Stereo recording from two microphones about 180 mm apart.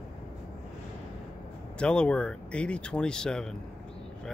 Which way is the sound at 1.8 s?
5° left (ahead or behind).